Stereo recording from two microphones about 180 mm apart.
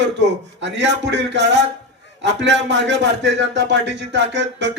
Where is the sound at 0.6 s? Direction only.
75° right (ahead or behind).